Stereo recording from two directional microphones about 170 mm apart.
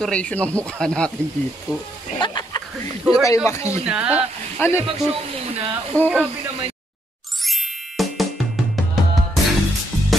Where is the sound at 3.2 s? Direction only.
15° left (ahead or behind).